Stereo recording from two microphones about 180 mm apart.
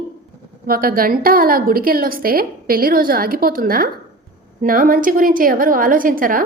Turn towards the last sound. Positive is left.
turn(degrees=-50)  # may be behind; listen again after turning